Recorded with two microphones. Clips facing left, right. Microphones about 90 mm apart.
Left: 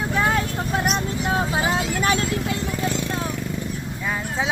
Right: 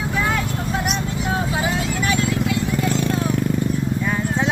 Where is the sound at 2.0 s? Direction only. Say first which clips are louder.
Right 3 dB; 35° left (ahead or behind).